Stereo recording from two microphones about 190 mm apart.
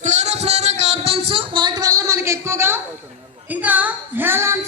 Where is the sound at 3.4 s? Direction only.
10° right (ahead or behind).